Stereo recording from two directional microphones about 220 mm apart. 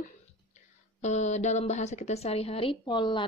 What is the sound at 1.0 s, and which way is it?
A woman's voice, 30° left (ahead or behind).